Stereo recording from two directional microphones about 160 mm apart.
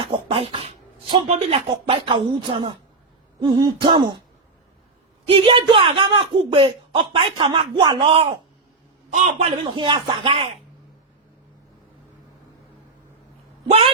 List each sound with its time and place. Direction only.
0.0 s speech: 35° right (ahead or behind)
3.4 s throat clearing: 30° right (ahead or behind)
5.3 s speech: 35° right (ahead or behind)
9.7 s speech: 30° right (ahead or behind)
13.7 s speech: 35° right (ahead or behind)